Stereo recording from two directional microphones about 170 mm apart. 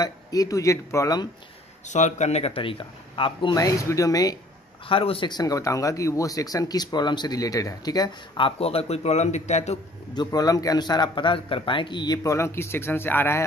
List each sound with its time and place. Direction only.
0.0 s speech: 20° left (ahead or behind)
1.9 s speech: 45° left (ahead or behind); by 4.4 s 20° left (ahead or behind)
4.8 s speech: 30° left (ahead or behind)
10.1 s speech: 20° left (ahead or behind)